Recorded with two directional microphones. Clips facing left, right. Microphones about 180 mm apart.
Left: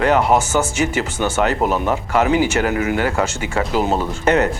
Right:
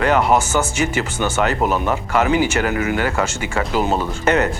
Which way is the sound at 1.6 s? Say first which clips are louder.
Left 1 dB; 15° left (ahead or behind).